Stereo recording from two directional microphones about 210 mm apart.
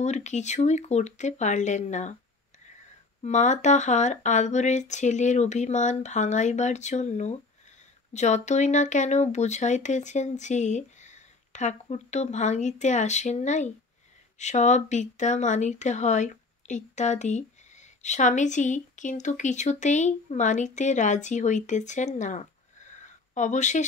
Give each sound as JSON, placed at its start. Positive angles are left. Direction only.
{"t": 0.0, "sound": "speech", "side_deg": 35}
{"t": 3.2, "sound": "speech", "side_deg": 35}
{"t": 22.9, "sound": "a sound", "side_deg": 35}